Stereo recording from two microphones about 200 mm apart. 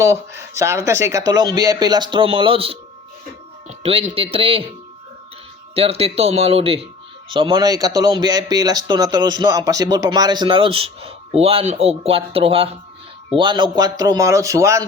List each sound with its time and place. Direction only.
0.0 s speech: 15° right (ahead or behind)
5.7 s speech: 30° right (ahead or behind)